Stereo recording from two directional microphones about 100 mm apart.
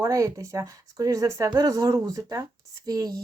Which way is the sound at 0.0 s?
35° right (ahead or behind).